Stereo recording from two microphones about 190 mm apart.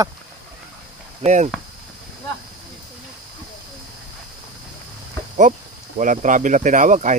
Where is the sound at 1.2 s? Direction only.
35° right (ahead or behind).